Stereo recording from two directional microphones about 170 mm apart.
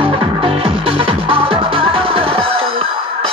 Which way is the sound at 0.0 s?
35° right (ahead or behind).